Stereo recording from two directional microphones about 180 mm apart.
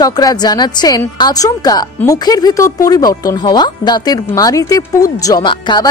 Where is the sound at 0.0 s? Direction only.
20° left (ahead or behind).